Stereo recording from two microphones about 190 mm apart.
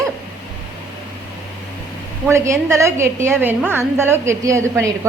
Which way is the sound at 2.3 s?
15° right (ahead or behind).